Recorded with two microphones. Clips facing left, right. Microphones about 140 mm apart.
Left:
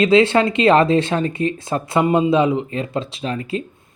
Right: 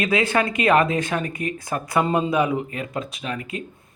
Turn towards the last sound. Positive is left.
turn(degrees=30)  # may be behind; listen again after turning